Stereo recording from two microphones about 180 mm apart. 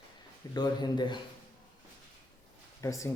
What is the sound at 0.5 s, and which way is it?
Speech, 25° left (ahead or behind).